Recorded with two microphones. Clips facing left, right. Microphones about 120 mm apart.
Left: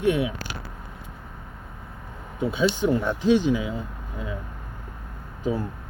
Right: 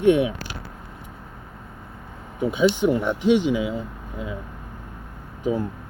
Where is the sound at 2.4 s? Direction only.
15° right (ahead or behind).